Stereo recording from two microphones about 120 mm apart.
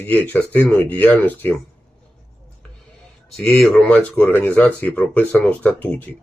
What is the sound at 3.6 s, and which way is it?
Speech, 10° left (ahead or behind).